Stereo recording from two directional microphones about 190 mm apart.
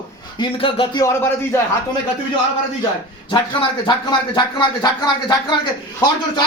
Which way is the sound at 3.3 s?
25° left (ahead or behind).